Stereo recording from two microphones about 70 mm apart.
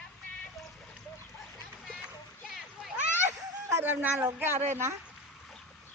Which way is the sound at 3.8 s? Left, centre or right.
Right.